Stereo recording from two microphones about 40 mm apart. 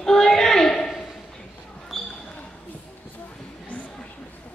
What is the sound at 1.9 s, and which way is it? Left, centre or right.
Basketball bounce, centre.